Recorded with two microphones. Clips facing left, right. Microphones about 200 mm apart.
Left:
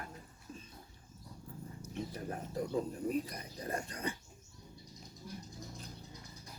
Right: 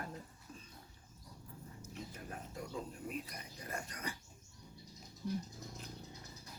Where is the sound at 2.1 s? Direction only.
35° left (ahead or behind).